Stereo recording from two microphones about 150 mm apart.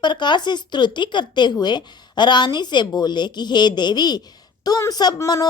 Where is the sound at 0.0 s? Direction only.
30° left (ahead or behind).